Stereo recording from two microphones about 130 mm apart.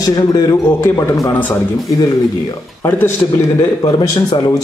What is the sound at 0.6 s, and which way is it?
Speech, 20° left (ahead or behind).